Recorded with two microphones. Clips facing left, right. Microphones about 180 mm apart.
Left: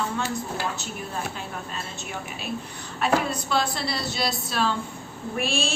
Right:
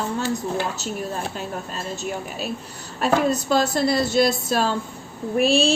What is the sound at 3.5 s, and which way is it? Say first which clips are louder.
A woman's voice: right 5 dB; 45° right (ahead or behind).